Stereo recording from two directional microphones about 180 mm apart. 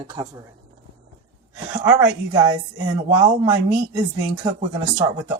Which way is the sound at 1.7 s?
15° right (ahead or behind).